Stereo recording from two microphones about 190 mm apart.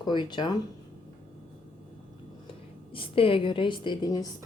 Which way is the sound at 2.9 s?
30° left (ahead or behind).